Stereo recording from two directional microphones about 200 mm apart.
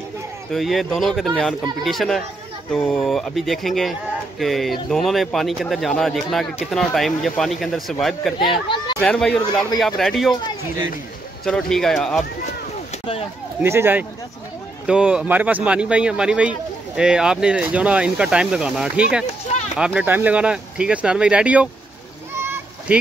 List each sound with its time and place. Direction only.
0.5 s speech: centre (ahead or behind)
8.6 s speech: 25° left (ahead or behind)
9.0 s speech: 5° left (ahead or behind)
11.4 s speech: 5° left (ahead or behind)
13.6 s speech: 10° right (ahead or behind)
22.3 s a sound: 10° right (ahead or behind)